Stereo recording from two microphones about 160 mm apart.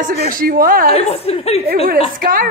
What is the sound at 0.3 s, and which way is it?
Speech, 60° right (ahead or behind).